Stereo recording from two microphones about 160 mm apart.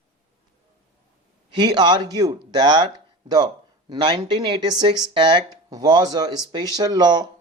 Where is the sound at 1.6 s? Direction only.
25° right (ahead or behind).